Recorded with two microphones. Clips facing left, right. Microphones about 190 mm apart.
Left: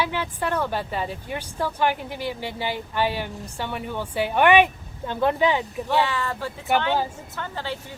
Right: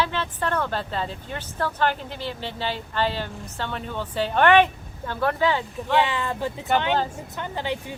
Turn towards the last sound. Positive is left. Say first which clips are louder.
# right 3 dB
turn(degrees=-15)  # may be behind; listen again after turning